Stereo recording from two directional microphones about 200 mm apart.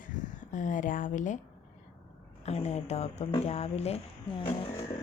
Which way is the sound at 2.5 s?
35° left (ahead or behind).